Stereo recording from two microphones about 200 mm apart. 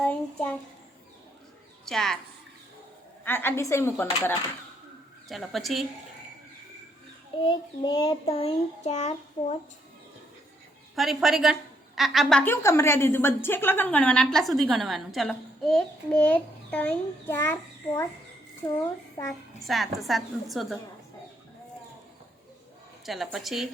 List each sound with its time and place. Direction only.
0.0 s a sound: 10° left (ahead or behind)
1.8 s a woman's voice: centre (ahead or behind)
3.2 s a woman's voice: 10° left (ahead or behind)
7.4 s child singing: 25° left (ahead or behind)
10.9 s a woman's voice: centre (ahead or behind)
19.6 s a woman's voice: centre (ahead or behind)
23.0 s a woman's voice: centre (ahead or behind)